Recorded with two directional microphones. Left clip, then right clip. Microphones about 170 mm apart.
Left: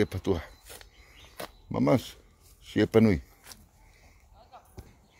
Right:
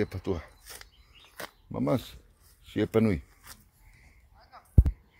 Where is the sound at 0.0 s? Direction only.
20° left (ahead or behind).